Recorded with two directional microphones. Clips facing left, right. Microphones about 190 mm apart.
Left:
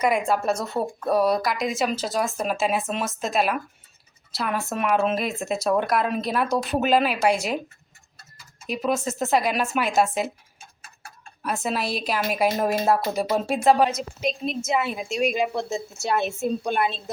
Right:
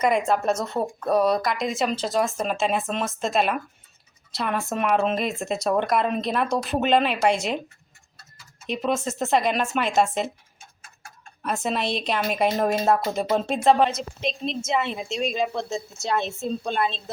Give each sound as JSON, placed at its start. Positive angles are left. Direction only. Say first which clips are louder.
{"t": 0.0, "sound": "a woman's voice", "louder": "right 1 dB", "side_deg": 5}
{"t": 8.6, "sound": "speech", "louder": "even", "side_deg": 0}
{"t": 11.4, "sound": "speech", "louder": "right 1 dB", "side_deg": 5}
{"t": 15.3, "sound": "a woman's voice", "louder": "left 1 dB", "side_deg": 15}